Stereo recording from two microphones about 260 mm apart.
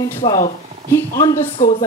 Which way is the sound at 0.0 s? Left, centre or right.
Centre.